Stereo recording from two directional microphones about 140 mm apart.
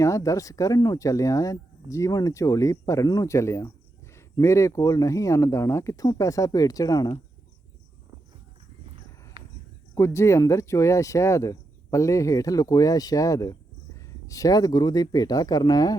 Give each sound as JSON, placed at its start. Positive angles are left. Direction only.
{"t": 0.0, "sound": "speech", "side_deg": 20}
{"t": 9.9, "sound": "speech", "side_deg": 20}